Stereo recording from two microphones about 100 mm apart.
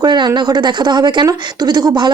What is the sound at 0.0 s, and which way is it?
Speech, 45° right (ahead or behind).